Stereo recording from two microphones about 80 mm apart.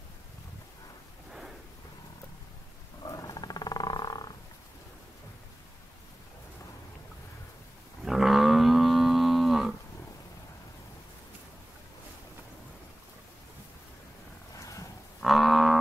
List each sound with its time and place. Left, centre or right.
3.0 s wild animals: left
8.0 s livestock: centre
14.6 s a sound: left
15.2 s livestock: centre